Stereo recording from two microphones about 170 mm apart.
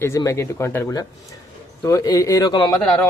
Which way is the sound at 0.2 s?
15° left (ahead or behind).